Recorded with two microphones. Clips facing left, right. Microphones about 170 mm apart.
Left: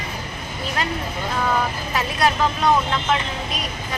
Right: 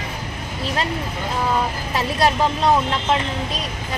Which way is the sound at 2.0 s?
30° right (ahead or behind).